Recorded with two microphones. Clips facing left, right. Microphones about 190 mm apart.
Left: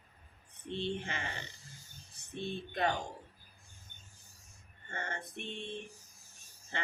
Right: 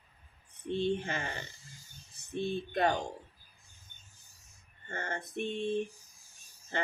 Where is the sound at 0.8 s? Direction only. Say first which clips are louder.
Right 6 dB; 45° right (ahead or behind).